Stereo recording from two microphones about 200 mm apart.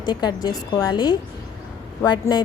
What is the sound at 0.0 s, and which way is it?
A woman's voice, 20° left (ahead or behind).